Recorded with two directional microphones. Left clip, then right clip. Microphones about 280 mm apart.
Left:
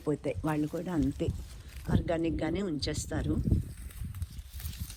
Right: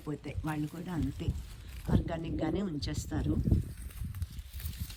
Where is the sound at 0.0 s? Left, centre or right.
Centre.